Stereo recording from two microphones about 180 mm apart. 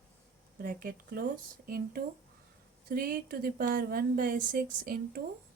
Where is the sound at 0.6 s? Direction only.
50° right (ahead or behind).